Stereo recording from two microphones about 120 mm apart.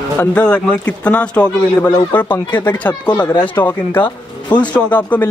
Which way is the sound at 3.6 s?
25° left (ahead or behind).